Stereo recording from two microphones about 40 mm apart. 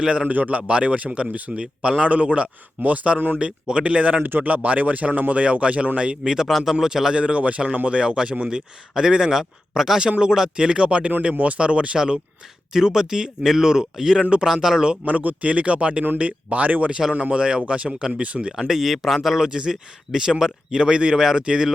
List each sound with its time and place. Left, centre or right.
0.0 s speech: centre
0.3 s a man's voice: right
0.7 s speech: right
3.3 s speech: right
4.2 s speech: right
6.3 s speech: centre
7.2 s speech: right; by 10.1 s centre
10.1 s speech: centre
11.9 s speech: centre
15.0 s speech: right
16.9 s speech: right
18.7 s speech: centre
19.5 s speech: centre